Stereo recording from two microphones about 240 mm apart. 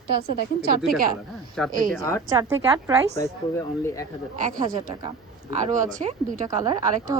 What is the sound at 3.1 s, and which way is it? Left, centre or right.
Speech, centre.